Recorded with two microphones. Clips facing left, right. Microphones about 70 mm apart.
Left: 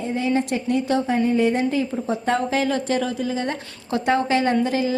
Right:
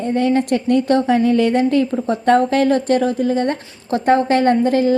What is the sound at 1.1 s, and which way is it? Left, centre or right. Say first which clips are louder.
A woman's voice: right 3 dB; right.